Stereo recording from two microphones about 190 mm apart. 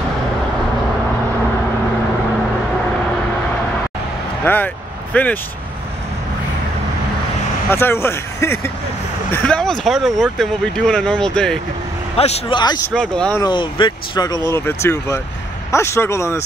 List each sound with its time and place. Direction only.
4.5 s speech: 10° left (ahead or behind)
7.7 s speech: 15° left (ahead or behind)
12.2 s speech: 30° left (ahead or behind)